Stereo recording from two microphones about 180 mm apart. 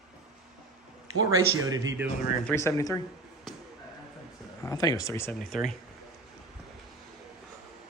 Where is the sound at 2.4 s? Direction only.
15° left (ahead or behind).